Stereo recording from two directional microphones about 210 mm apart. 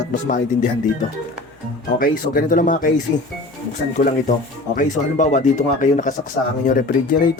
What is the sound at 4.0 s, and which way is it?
Speech, 35° left (ahead or behind).